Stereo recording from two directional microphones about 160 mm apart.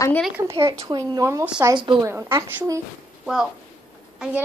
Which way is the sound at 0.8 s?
20° right (ahead or behind).